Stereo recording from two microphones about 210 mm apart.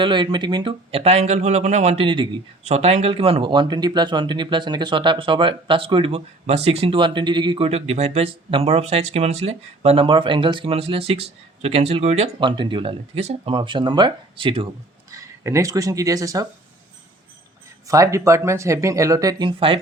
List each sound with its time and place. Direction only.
0.0 s speech: 20° right (ahead or behind)
15.1 s speech: 15° right (ahead or behind)
17.8 s speech: 15° right (ahead or behind)